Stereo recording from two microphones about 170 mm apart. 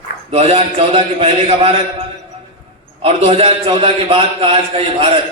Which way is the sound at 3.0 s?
35° right (ahead or behind).